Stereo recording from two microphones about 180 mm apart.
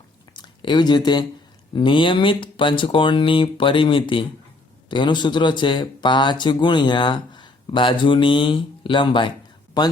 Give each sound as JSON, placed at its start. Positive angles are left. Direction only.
{"t": 0.3, "sound": "speech", "side_deg": 25}